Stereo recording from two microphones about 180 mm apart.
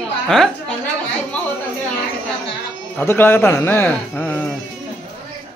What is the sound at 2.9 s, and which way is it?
A man's voice, 10° left (ahead or behind).